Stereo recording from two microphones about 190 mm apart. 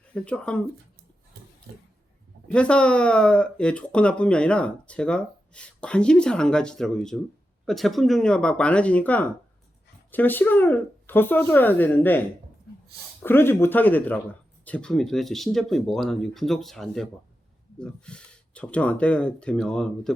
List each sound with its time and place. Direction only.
0.1 s speech: 5° left (ahead or behind)
1.7 s a sound: 60° right (ahead or behind)
2.5 s speech: 5° left (ahead or behind)
13.2 s speech: 10° left (ahead or behind)